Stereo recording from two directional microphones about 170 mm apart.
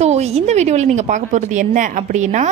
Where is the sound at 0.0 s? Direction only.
40° right (ahead or behind).